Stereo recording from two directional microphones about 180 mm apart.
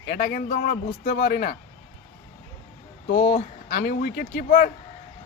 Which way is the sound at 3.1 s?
45° left (ahead or behind).